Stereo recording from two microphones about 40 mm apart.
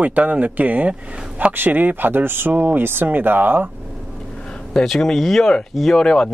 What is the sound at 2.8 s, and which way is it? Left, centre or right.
Speech, right.